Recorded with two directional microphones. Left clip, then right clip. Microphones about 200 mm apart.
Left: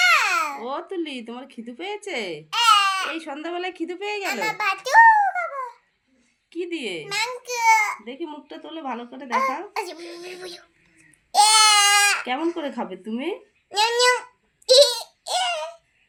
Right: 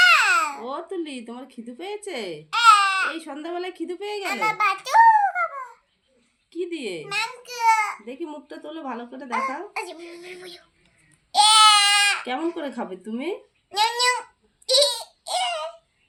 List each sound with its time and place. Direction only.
0.0 s babbling: 30° left (ahead or behind)
0.6 s a woman's voice: 5° left (ahead or behind)
2.5 s baby cry: 40° left (ahead or behind)
3.1 s a woman's voice: 5° left (ahead or behind)
4.2 s a child's voice: 40° left (ahead or behind)
6.5 s speech: 5° left (ahead or behind)
7.0 s a sound: 45° left (ahead or behind)
8.0 s speech: 5° left (ahead or behind)
9.9 s speech: 35° left (ahead or behind)
11.3 s a sound: 40° left (ahead or behind)
12.6 s speech: centre (ahead or behind)
13.7 s babbling: 35° left (ahead or behind)
14.7 s a sound: 40° left (ahead or behind)